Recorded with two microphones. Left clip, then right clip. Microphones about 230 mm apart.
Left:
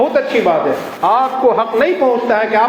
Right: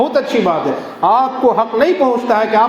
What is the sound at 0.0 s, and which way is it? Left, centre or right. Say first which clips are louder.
A man's voice: left 1 dB; right.